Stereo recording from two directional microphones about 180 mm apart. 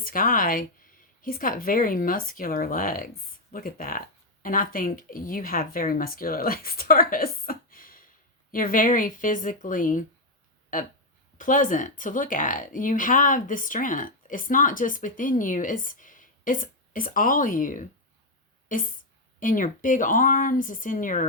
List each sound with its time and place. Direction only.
0.0 s speech: 50° left (ahead or behind)
11.3 s speech: 50° left (ahead or behind)